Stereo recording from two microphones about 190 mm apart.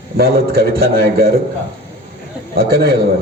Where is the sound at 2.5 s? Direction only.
55° right (ahead or behind).